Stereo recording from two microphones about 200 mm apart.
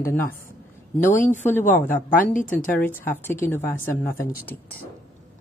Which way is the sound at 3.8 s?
45° left (ahead or behind).